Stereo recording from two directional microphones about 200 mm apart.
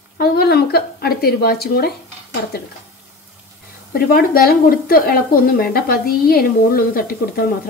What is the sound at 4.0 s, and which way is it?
Speech, 50° left (ahead or behind).